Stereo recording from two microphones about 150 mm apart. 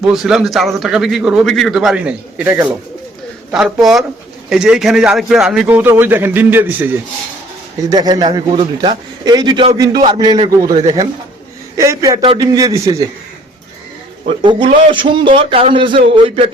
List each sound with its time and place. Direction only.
0.0 s a man's voice: 5° right (ahead or behind)
7.8 s a man's voice: 25° right (ahead or behind)
12.2 s a man's voice: 35° right (ahead or behind)
12.5 s a man's voice: 25° right (ahead or behind)
14.3 s a man's voice: 35° right (ahead or behind)